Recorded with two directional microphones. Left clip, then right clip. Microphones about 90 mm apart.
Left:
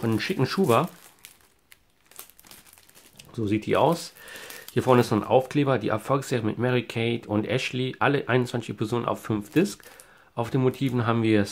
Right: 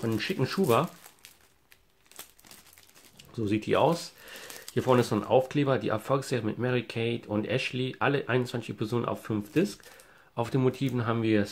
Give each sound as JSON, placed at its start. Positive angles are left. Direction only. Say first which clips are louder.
{"t": 0.0, "sound": "speech", "louder": "left 4 dB", "side_deg": 30}
{"t": 3.2, "sound": "a sound", "louder": "left 3 dB", "side_deg": 30}
{"t": 3.4, "sound": "speech", "louder": "left 3 dB", "side_deg": 15}
{"t": 10.3, "sound": "speech", "louder": "left 3 dB", "side_deg": 10}
{"t": 11.0, "sound": "speech", "louder": "left 5 dB", "side_deg": 35}